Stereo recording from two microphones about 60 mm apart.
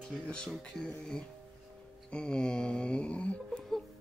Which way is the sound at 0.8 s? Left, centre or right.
Centre.